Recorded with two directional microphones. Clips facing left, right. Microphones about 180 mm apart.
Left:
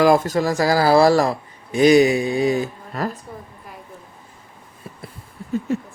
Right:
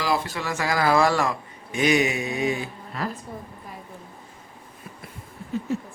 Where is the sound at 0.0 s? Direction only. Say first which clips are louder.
Left 10 dB; 45° left (ahead or behind).